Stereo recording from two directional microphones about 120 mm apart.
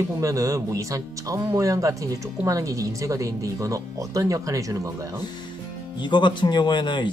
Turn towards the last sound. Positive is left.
turn(degrees=40)  # may be behind; listen again after turning